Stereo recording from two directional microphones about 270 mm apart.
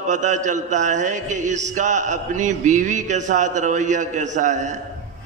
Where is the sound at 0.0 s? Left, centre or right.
Right.